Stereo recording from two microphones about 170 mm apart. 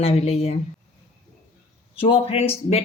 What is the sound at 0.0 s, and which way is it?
Speech, 35° left (ahead or behind).